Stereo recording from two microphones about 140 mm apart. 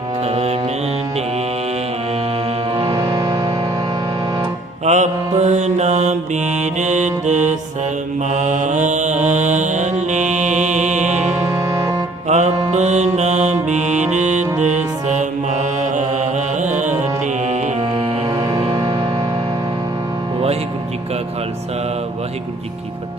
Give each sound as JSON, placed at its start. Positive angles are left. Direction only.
{"t": 0.3, "sound": "music", "side_deg": -50}
{"t": 2.7, "sound": "music", "side_deg": -40}
{"t": 3.1, "sound": "music", "side_deg": -25}
{"t": 4.9, "sound": "mantra", "side_deg": -55}
{"t": 6.6, "sound": "music", "side_deg": -55}
{"t": 8.3, "sound": "mantra", "side_deg": -60}
{"t": 11.3, "sound": "music", "side_deg": -20}
{"t": 12.3, "sound": "music", "side_deg": -55}
{"t": 17.9, "sound": "music", "side_deg": -25}